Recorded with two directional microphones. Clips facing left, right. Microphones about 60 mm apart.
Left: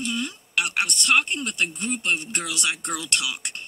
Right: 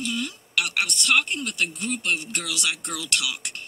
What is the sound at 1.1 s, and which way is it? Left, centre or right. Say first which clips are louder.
A man's voice: left 1 dB; left.